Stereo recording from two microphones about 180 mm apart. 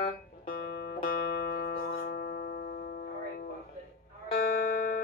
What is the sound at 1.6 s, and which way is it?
Music, 55° left (ahead or behind).